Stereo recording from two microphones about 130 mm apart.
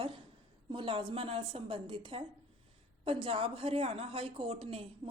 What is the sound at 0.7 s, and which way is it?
A woman's voice, 40° right (ahead or behind).